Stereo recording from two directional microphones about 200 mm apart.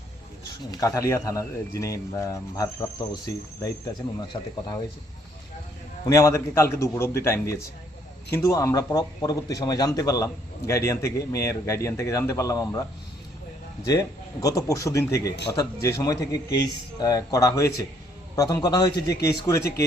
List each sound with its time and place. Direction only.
0.7 s speech: 15° left (ahead or behind)
6.1 s speech: 15° left (ahead or behind)
13.8 s speech: 15° left (ahead or behind)